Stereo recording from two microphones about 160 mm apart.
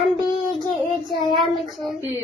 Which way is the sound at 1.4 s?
Centre (ahead or behind).